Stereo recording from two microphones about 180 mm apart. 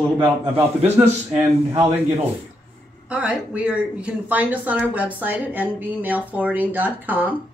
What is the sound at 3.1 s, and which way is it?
Speech, 5° right (ahead or behind).